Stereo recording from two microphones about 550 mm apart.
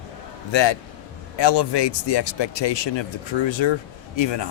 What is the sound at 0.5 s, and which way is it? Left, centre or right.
Speech, left.